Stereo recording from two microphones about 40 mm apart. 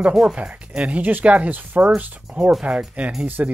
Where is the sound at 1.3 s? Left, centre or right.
Right.